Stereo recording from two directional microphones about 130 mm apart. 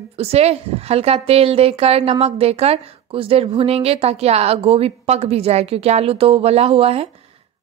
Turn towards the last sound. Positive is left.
turn(degrees=-50)  # may be behind; listen again after turning